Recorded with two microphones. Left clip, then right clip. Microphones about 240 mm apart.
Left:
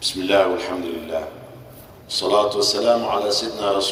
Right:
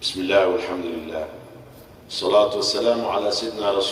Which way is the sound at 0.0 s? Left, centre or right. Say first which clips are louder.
Left 1 dB; left.